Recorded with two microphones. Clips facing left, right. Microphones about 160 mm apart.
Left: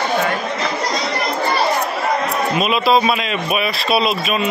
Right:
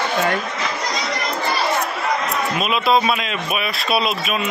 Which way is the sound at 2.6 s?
Centre (ahead or behind).